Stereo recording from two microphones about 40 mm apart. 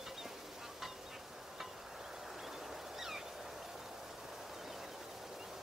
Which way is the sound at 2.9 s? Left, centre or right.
Centre.